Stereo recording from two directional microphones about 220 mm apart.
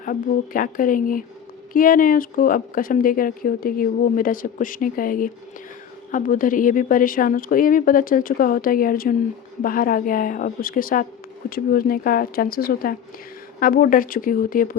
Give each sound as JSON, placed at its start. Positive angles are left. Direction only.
{"t": 0.0, "sound": "speech", "side_deg": 35}